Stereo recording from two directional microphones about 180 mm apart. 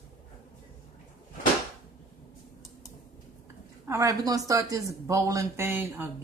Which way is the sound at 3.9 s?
20° right (ahead or behind).